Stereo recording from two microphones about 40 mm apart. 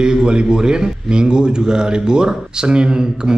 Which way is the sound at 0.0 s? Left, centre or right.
Right.